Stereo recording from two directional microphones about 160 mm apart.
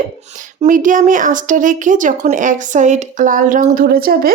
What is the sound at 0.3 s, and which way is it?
A woman's voice, 55° right (ahead or behind).